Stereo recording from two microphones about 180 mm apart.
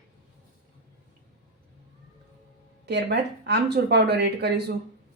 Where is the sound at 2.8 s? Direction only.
70° right (ahead or behind).